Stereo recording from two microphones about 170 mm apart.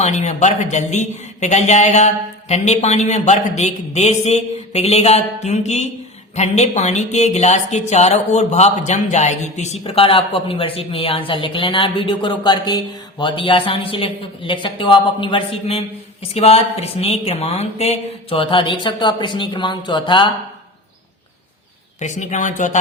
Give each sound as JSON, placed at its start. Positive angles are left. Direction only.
{"t": 0.0, "sound": "a man's voice", "side_deg": 45}
{"t": 22.0, "sound": "a man's voice", "side_deg": 45}